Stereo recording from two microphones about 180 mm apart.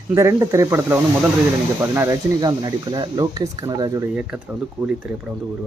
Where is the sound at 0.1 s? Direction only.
15° right (ahead or behind).